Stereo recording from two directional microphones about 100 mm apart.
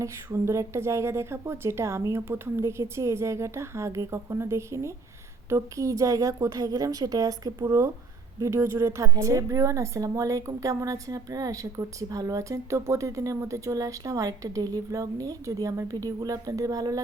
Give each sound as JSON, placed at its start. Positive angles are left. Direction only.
{"t": 0.3, "sound": "a woman's voice", "side_deg": -30}